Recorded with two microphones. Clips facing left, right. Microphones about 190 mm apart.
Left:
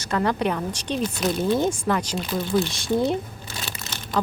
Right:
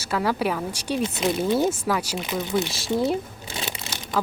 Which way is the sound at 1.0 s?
25° right (ahead or behind).